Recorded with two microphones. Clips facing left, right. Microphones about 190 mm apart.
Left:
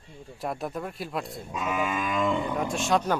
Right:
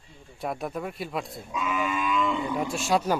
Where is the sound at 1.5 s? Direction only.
45° left (ahead or behind).